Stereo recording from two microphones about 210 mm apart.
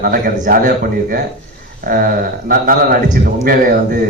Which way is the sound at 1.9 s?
45° right (ahead or behind).